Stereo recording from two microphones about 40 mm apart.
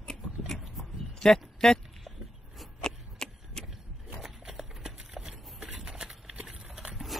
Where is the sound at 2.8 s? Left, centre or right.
Centre.